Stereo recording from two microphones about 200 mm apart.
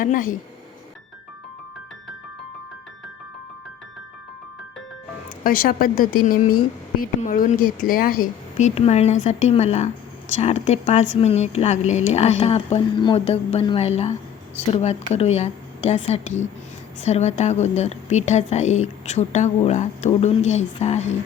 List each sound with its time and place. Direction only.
0.0 s speech: 45° left (ahead or behind)
5.4 s a woman's voice: 45° left (ahead or behind)